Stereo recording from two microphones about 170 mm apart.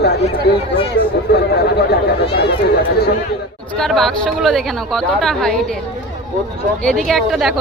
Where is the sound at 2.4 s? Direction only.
70° left (ahead or behind).